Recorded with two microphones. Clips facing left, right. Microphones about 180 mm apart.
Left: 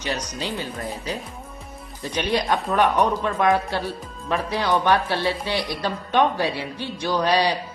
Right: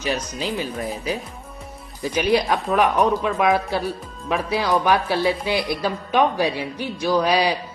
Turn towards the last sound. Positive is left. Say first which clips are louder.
# right 2 dB
turn(degrees=-10)  # may be behind; listen again after turning